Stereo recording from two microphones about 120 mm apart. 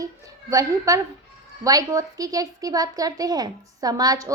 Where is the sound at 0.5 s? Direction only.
30° right (ahead or behind).